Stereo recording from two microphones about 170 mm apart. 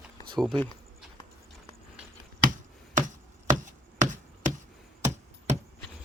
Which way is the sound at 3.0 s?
50° right (ahead or behind).